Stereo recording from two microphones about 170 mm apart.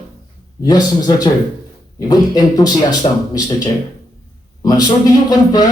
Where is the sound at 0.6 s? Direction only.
20° left (ahead or behind).